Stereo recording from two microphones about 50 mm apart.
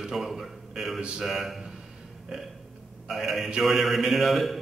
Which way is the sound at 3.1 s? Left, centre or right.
Centre.